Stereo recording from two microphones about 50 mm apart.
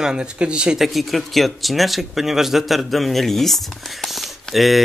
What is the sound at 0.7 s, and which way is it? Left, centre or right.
Speech, centre.